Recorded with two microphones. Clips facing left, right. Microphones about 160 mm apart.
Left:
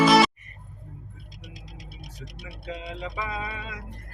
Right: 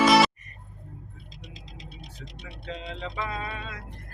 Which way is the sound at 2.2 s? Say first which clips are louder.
Left 2 dB; 10° left (ahead or behind).